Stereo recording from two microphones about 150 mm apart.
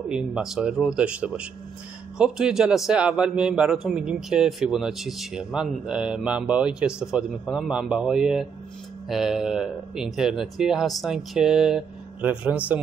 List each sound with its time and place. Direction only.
0.1 s a man's voice: 5° right (ahead or behind)